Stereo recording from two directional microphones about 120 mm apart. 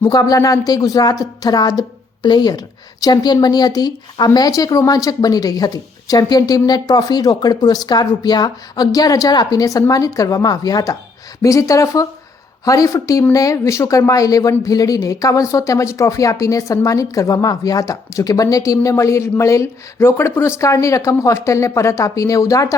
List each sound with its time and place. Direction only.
0.0 s speech: 30° left (ahead or behind)